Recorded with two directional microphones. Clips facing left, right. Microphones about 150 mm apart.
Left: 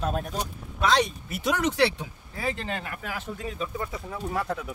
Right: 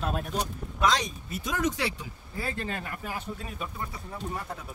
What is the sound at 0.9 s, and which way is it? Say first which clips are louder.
Speech: left 6 dB; 70° left (ahead or behind).